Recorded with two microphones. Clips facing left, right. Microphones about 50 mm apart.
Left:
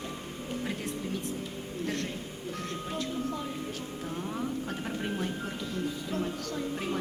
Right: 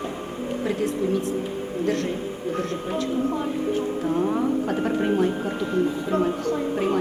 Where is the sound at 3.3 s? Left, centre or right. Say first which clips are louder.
Right 10 dB; right.